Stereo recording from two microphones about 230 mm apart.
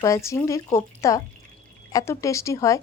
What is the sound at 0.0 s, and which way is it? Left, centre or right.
Speech, centre.